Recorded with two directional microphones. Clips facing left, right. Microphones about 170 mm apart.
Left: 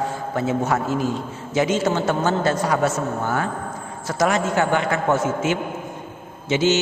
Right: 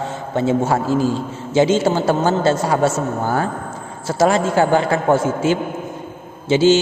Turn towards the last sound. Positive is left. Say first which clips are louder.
# right 6 dB
turn(degrees=-30)  # may be behind; listen again after turning